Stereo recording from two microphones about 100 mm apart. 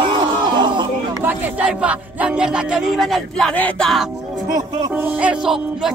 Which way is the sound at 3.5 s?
15° left (ahead or behind).